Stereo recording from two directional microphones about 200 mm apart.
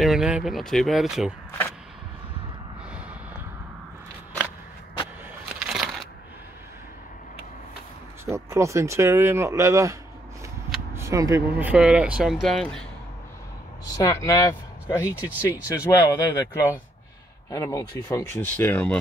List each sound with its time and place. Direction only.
0.0 s speech: centre (ahead or behind)
5.5 s crushing: centre (ahead or behind)
8.3 s speech: 15° right (ahead or behind)
11.0 s speech: 15° right (ahead or behind); by 12.8 s centre (ahead or behind)
13.9 s speech: 15° left (ahead or behind)
15.0 s speech: 10° right (ahead or behind)
16.0 s speech: 15° left (ahead or behind)